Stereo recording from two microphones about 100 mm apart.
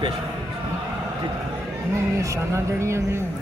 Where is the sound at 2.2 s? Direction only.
30° right (ahead or behind).